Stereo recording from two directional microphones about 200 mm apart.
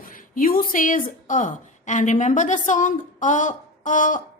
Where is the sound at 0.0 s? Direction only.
45° left (ahead or behind).